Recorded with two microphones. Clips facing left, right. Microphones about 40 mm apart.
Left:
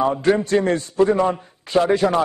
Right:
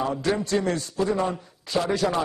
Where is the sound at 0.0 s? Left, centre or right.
Left.